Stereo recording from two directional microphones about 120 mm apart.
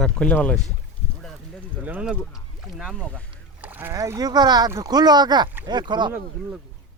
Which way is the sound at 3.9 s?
30° right (ahead or behind).